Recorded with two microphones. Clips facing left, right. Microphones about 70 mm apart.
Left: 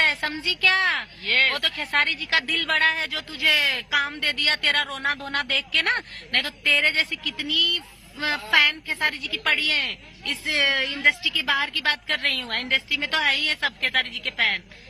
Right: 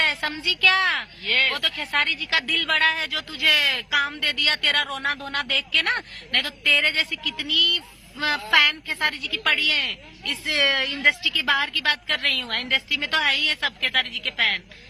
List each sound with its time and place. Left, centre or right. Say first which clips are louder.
0.0 s a sound: left 1 dB; left
0.3 s speech: right 1 dB; left
6.3 s speech: right 1 dB; left
9.6 s speech: right 1 dB; left
9.8 s speech: even; left